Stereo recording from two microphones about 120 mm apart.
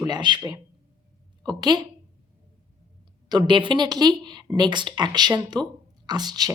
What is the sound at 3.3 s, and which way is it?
Speech, 40° right (ahead or behind).